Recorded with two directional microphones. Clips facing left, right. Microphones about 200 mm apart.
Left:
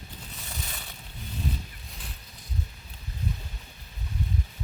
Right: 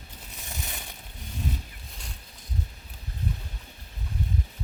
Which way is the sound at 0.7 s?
15° right (ahead or behind).